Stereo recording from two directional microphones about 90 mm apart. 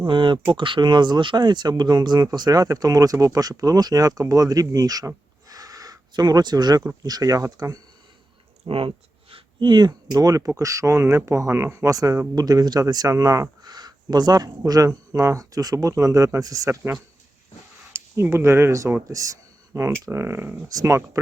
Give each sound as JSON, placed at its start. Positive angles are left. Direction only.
{"t": 0.0, "sound": "speech", "side_deg": -65}
{"t": 8.6, "sound": "speech", "side_deg": -85}
{"t": 9.3, "sound": "speech", "side_deg": -60}
{"t": 13.6, "sound": "a sound", "side_deg": -50}
{"t": 14.7, "sound": "speech", "side_deg": -40}
{"t": 17.9, "sound": "speech", "side_deg": -30}
{"t": 20.7, "sound": "speech", "side_deg": -40}